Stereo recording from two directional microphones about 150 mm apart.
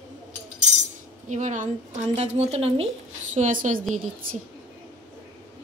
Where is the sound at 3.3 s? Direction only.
55° right (ahead or behind).